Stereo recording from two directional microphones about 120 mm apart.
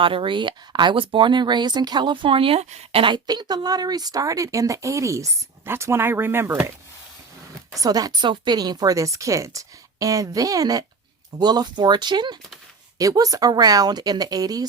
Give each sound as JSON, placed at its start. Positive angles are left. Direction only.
{"t": 0.0, "sound": "speech", "side_deg": -45}
{"t": 3.0, "sound": "speech", "side_deg": -40}
{"t": 7.7, "sound": "speech", "side_deg": -30}